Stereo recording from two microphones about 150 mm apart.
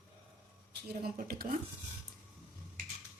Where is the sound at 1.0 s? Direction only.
80° right.